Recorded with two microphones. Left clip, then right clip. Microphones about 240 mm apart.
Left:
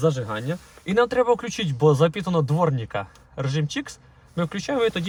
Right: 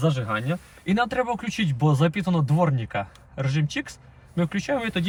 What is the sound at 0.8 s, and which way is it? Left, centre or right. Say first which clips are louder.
Speech: left 5 dB; centre.